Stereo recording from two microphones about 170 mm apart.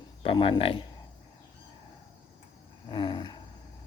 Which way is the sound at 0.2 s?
30° left (ahead or behind).